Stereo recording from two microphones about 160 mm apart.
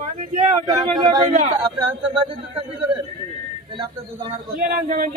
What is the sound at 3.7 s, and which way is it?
Speech, 25° right (ahead or behind).